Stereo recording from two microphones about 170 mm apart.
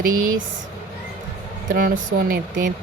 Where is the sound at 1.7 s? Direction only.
55° right (ahead or behind).